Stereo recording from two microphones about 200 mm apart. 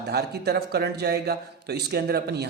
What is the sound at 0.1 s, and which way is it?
Speech, 55° right (ahead or behind).